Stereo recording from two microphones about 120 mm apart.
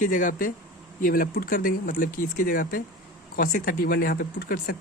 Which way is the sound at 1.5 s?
90° left.